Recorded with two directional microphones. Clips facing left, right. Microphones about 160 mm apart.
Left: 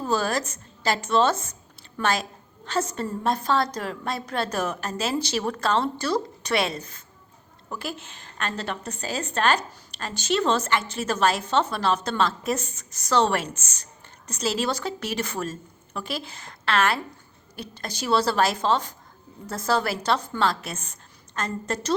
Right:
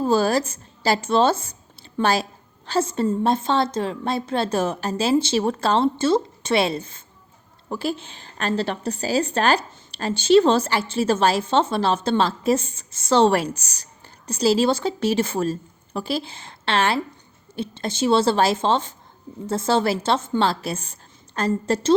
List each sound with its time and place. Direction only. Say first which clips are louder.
0.0 s a woman's voice: right 6 dB; 30° right (ahead or behind)